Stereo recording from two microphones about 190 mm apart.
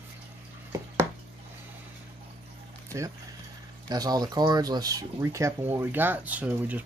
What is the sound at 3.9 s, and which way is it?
Speech, 20° right (ahead or behind).